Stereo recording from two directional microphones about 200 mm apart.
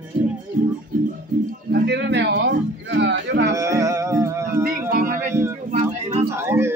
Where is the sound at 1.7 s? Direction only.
60° right (ahead or behind).